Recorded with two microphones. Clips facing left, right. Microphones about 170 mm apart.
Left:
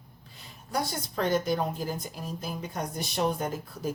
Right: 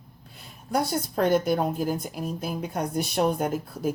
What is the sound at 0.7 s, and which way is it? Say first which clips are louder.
A woman's voice: right 6 dB; 55° right (ahead or behind).